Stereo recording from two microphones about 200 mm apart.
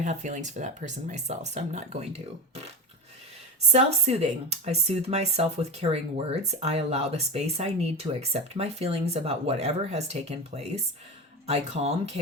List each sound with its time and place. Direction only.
0.0 s speech: 35° right (ahead or behind)
3.7 s speech: 35° right (ahead or behind)